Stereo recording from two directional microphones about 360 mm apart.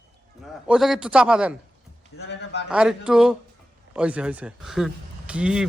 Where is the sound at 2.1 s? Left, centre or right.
Left.